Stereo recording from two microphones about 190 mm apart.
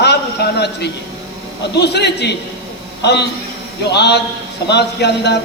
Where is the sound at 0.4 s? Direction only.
60° left (ahead or behind).